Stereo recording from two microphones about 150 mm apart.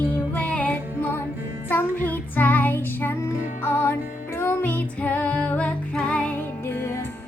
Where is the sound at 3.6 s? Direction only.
15° left (ahead or behind).